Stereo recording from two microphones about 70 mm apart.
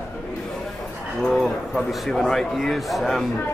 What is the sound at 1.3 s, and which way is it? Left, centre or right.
A man's voice, centre.